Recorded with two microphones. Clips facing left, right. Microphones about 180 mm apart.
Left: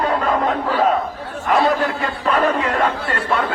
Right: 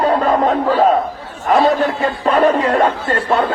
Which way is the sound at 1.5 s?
35° right (ahead or behind).